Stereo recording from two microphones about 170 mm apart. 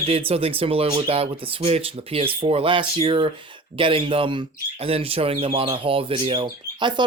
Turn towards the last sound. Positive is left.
turn(degrees=-30)  # may be behind; listen again after turning